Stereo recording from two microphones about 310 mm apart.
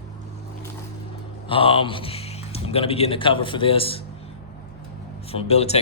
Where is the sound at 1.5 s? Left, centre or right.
Centre.